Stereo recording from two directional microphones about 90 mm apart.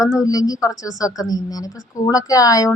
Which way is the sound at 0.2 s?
40° left (ahead or behind).